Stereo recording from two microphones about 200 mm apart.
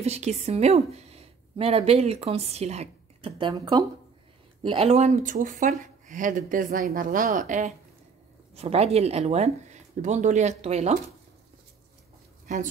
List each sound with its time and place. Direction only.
0.0 s a woman's voice: 35° right (ahead or behind)
12.5 s speech: 40° right (ahead or behind)